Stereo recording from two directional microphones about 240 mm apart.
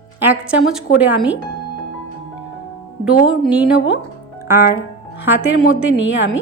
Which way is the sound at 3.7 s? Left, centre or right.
Left.